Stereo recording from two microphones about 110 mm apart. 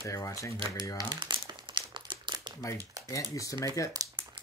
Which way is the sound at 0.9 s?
40° right (ahead or behind).